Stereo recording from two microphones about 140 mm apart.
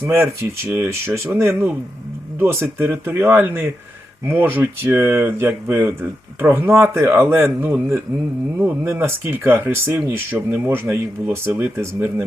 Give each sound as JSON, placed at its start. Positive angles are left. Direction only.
{"t": 0.0, "sound": "speech", "side_deg": -20}